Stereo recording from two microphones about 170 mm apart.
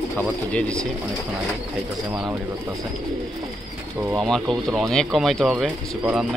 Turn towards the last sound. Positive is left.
turn(degrees=-5)  # may be behind; listen again after turning